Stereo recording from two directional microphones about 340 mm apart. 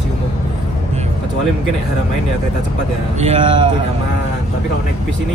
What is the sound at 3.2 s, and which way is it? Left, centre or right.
Speech, centre.